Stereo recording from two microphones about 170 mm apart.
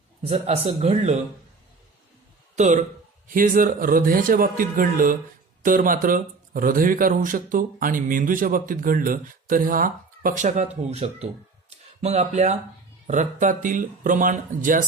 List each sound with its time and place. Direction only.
0.3 s speech: 40° right (ahead or behind)
2.6 s speech: 45° right (ahead or behind)
11.7 s a sound: 40° right (ahead or behind)
13.1 s speech: 45° right (ahead or behind)